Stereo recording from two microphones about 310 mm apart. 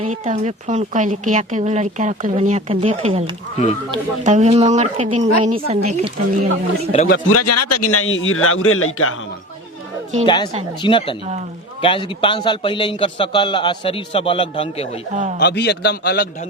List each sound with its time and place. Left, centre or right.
0.0 s a woman's voice: right
6.9 s speech: left
7.3 s a man's voice: left
10.2 s a man's voice: centre
15.1 s a woman's voice: right
15.4 s a man's voice: left